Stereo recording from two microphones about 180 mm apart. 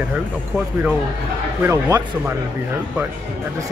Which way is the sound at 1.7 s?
15° right (ahead or behind).